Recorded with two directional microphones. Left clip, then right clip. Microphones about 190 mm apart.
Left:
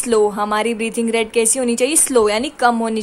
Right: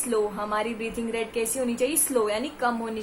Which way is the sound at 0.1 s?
50° left (ahead or behind).